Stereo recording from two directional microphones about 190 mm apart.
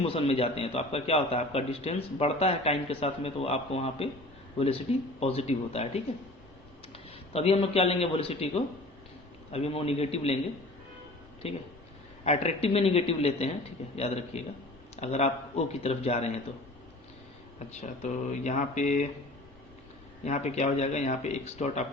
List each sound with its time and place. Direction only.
0.0 s a man's voice: 30° left (ahead or behind)
11.4 s a man's voice: 30° left (ahead or behind)
17.7 s a man's voice: 40° left (ahead or behind)
20.2 s a man's voice: 35° left (ahead or behind)